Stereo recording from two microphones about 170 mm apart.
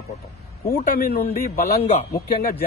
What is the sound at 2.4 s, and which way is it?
Speech, 60° left (ahead or behind).